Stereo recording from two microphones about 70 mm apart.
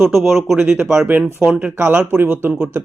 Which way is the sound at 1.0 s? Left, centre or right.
Right.